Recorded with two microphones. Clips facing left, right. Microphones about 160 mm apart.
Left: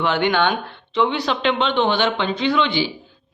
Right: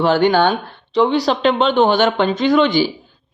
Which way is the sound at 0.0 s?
35° right (ahead or behind).